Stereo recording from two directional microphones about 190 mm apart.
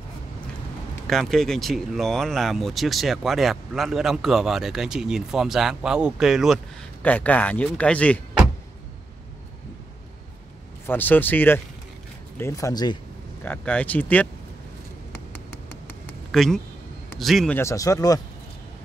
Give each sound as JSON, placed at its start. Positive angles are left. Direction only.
{"t": 1.0, "sound": "speech", "side_deg": 0}
{"t": 10.9, "sound": "speech", "side_deg": 10}
{"t": 13.4, "sound": "speech", "side_deg": 10}
{"t": 16.3, "sound": "speech", "side_deg": 0}
{"t": 17.6, "sound": "speech", "side_deg": 15}